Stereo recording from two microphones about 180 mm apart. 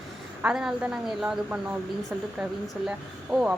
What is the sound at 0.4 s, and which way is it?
Speech, 5° right (ahead or behind).